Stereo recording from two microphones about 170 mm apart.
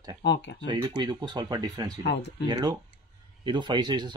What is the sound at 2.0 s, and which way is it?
Speech, 75° left (ahead or behind).